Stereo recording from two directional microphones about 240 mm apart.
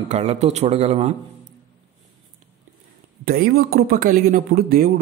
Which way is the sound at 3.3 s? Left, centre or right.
Right.